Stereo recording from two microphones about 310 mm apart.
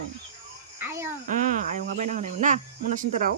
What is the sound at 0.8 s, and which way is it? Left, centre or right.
Cricket, centre.